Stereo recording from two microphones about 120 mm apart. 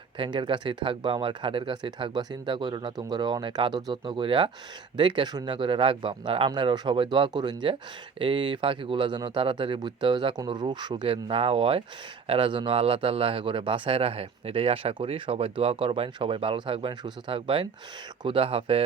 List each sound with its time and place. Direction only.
0.2 s speech: 45° right (ahead or behind)